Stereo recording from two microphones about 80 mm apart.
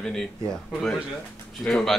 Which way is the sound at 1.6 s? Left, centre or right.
Centre.